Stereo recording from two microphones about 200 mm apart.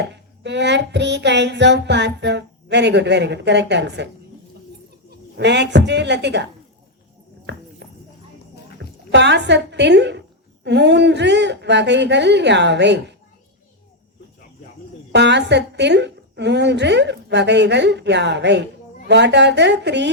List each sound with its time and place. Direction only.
0.0 s child singing: 60° right (ahead or behind)
5.4 s child singing: 60° right (ahead or behind)
7.5 s horse: 60° right (ahead or behind)
9.1 s child singing: 60° right (ahead or behind)
15.1 s child singing: 60° right (ahead or behind)